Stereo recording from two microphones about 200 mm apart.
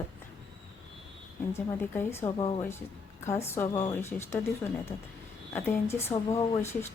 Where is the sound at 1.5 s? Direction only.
10° left (ahead or behind).